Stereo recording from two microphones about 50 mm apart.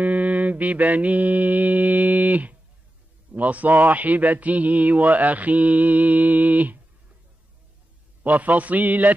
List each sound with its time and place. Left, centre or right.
0.0 s mantra: right
3.3 s speech: right
8.2 s speech: right